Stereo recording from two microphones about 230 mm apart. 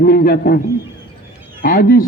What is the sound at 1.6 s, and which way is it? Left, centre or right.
Speech, left.